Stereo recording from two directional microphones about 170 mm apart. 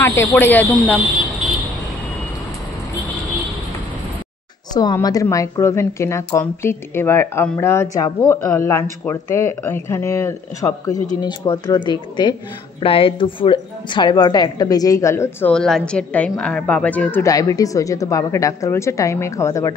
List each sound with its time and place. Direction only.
0.0 s a woman's voice: 10° left (ahead or behind)
4.7 s a woman's voice: 25° left (ahead or behind)
15.5 s a woman's voice: 5° left (ahead or behind)